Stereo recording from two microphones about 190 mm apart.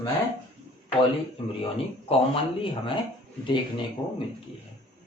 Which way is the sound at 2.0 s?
30° left (ahead or behind).